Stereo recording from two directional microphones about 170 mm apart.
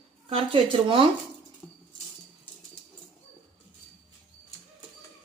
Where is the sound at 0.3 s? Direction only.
30° right (ahead or behind).